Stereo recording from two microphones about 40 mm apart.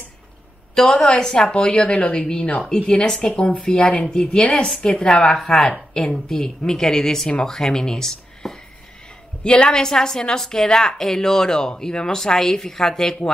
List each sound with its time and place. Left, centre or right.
0.7 s a woman's voice: centre
9.4 s a woman's voice: left
9.8 s speech: centre